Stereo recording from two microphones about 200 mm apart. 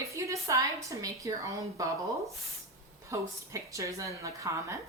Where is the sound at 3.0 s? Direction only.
15° right (ahead or behind).